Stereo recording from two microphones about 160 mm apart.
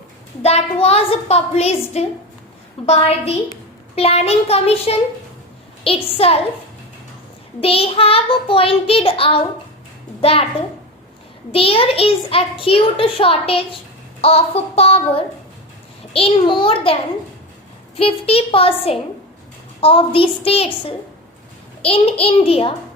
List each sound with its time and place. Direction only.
0.4 s a child's voice: 40° left (ahead or behind)
7.6 s a child's voice: 35° left (ahead or behind)
11.5 s a child's voice: 35° left (ahead or behind)